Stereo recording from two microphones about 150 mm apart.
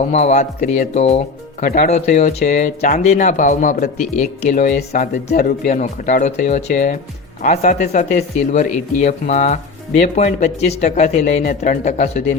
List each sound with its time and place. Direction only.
0.1 s speech: 45° left (ahead or behind)
1.6 s speech: 60° left (ahead or behind)